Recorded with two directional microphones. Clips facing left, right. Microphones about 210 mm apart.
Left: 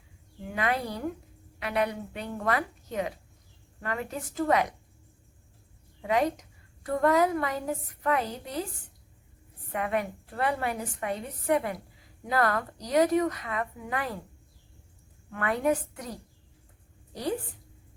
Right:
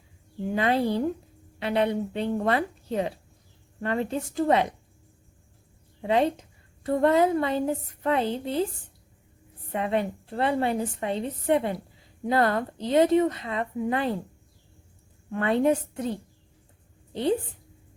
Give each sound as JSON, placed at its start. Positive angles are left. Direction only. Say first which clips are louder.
{"t": 0.4, "sound": "a woman's voice", "louder": "right 6 dB", "side_deg": -30}
{"t": 6.0, "sound": "a woman's voice", "louder": "right 3 dB", "side_deg": -30}
{"t": 9.7, "sound": "a woman's voice", "louder": "right 3 dB", "side_deg": -25}
{"t": 15.3, "sound": "a woman's voice", "louder": "right 5 dB", "side_deg": -25}